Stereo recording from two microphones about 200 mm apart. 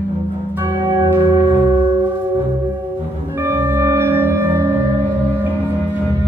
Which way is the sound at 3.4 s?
10° right (ahead or behind).